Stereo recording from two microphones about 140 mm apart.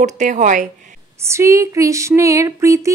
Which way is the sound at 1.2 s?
20° right (ahead or behind).